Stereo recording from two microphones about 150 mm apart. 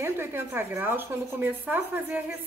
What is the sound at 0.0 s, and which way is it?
Speech, 15° right (ahead or behind).